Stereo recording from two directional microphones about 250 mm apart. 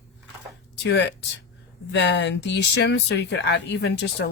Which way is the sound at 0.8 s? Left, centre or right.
Left.